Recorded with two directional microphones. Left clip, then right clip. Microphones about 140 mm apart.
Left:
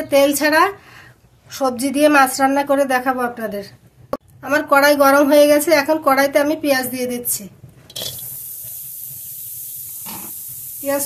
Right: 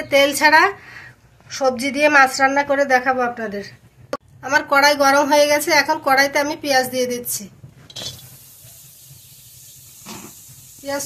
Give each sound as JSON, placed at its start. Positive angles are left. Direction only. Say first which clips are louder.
{"t": 0.0, "sound": "a woman's voice", "louder": "even", "side_deg": 60}
{"t": 1.5, "sound": "a woman's voice", "louder": "even", "side_deg": 90}
{"t": 7.9, "sound": "a sound", "louder": "left 3 dB", "side_deg": 35}